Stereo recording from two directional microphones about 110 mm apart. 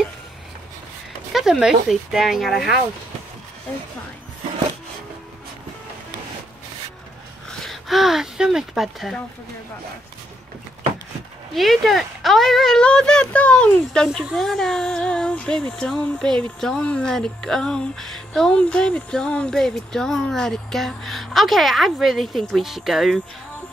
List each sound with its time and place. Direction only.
1.3 s speech: 5° right (ahead or behind)
7.6 s speech: centre (ahead or behind)
11.5 s speech: centre (ahead or behind)